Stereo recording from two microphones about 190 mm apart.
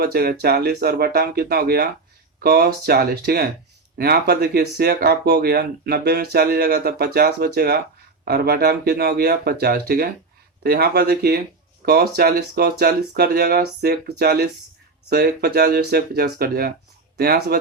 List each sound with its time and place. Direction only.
0.0 s speech: 55° right (ahead or behind)